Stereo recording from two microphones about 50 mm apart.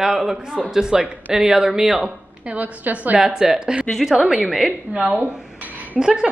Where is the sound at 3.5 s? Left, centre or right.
Right.